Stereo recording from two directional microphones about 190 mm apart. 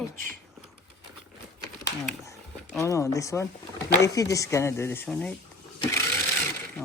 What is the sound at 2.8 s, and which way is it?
Speech, 15° left (ahead or behind).